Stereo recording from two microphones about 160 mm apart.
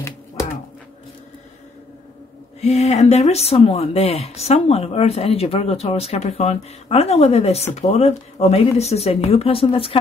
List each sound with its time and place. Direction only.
2.6 s speech: 45° left (ahead or behind)